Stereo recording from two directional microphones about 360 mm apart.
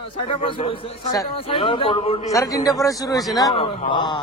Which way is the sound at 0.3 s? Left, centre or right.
Centre.